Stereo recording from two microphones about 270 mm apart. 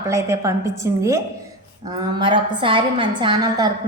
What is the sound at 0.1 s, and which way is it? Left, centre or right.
A woman's voice, centre.